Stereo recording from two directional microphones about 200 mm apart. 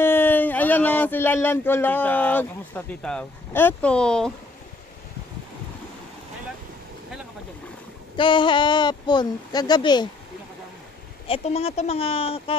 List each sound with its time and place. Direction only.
0.0 s speech: 10° left (ahead or behind)
8.2 s speech: 25° left (ahead or behind)
11.2 s speech: 30° left (ahead or behind)